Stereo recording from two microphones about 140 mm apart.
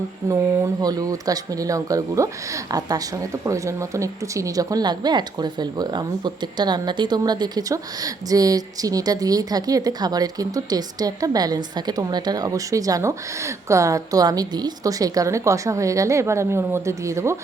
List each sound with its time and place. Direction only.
0.3 s speech: 20° right (ahead or behind)